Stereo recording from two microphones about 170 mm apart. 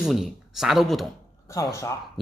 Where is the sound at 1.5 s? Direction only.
15° left (ahead or behind).